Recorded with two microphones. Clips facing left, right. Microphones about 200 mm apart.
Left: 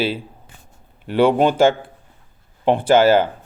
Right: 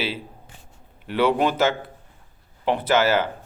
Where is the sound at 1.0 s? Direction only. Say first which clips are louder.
Left 5 dB; 30° left (ahead or behind).